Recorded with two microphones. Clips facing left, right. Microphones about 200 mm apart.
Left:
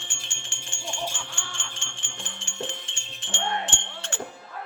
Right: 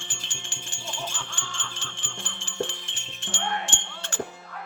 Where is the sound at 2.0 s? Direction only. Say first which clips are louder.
Right 1 dB; 35° right (ahead or behind).